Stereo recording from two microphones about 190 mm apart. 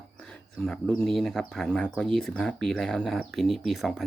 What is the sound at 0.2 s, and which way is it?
Speech, 5° left (ahead or behind).